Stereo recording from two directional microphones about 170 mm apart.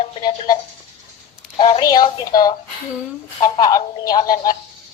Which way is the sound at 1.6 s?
25° left (ahead or behind).